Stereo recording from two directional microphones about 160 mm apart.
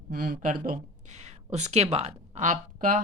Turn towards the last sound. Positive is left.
turn(degrees=-55)  # may be behind; listen again after turning